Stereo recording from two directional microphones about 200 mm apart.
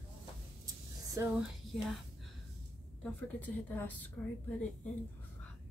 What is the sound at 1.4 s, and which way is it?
A woman's voice, centre (ahead or behind).